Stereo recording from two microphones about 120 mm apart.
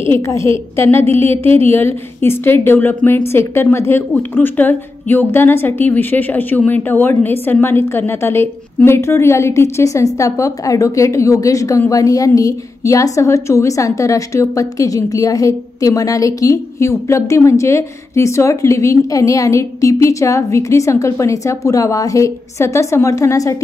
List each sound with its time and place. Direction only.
0.1 s a woman's voice: 25° left (ahead or behind)
1.3 s a woman's voice: 55° right (ahead or behind)
1.6 s a woman's voice: 20° left (ahead or behind)